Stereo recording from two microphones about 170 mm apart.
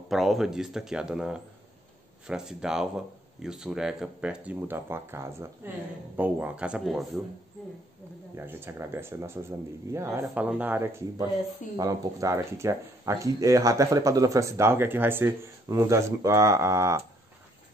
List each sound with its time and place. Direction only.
0.1 s speech: centre (ahead or behind)
8.4 s speech: 15° right (ahead or behind)